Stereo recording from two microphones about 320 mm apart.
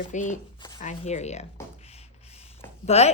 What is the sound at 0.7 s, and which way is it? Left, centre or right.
Speech, left.